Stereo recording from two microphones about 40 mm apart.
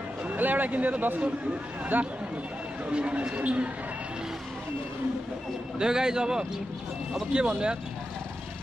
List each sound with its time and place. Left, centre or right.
0.3 s a man's voice: right
2.9 s speech: right
5.8 s a man's voice: centre